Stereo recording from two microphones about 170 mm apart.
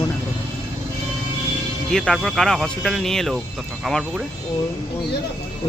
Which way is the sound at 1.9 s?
Centre (ahead or behind).